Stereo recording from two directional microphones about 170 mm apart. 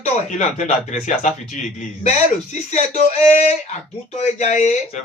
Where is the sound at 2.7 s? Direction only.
45° left (ahead or behind).